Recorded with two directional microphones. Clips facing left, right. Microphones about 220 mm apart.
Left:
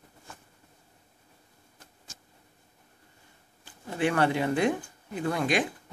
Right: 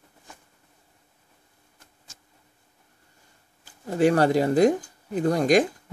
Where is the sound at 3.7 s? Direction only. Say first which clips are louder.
Right 7 dB; 40° right (ahead or behind).